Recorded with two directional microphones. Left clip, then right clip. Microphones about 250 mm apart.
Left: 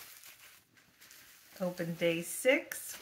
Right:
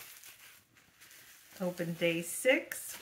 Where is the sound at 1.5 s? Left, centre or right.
Centre.